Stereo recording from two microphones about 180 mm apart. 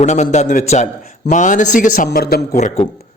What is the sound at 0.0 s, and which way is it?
A man's voice, 40° left (ahead or behind).